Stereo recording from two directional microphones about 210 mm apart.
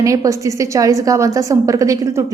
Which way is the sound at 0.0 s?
15° right (ahead or behind).